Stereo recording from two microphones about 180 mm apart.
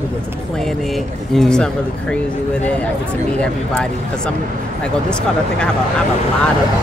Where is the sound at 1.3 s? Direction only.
5° left (ahead or behind).